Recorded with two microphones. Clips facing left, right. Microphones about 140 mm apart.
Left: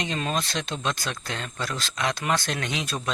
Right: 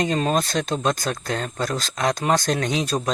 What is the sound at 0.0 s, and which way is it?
Speech, 40° right (ahead or behind).